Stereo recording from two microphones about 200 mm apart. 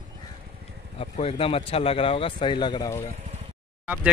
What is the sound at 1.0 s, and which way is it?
Speech, 30° left (ahead or behind).